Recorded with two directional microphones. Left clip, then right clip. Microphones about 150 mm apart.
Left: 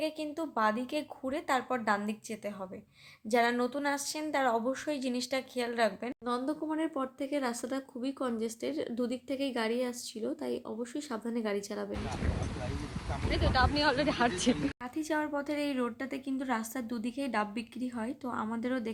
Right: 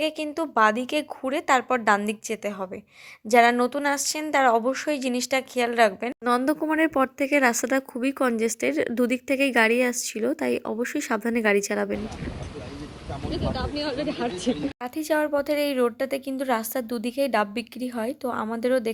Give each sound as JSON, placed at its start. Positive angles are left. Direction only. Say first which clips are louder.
{"t": 0.0, "sound": "a woman's voice", "louder": "right 8 dB", "side_deg": -40}
{"t": 6.2, "sound": "speech", "louder": "right 11 dB", "side_deg": -70}
{"t": 13.2, "sound": "speech", "louder": "left 1 dB", "side_deg": 10}
{"t": 14.9, "sound": "a woman's voice", "louder": "right 11 dB", "side_deg": -45}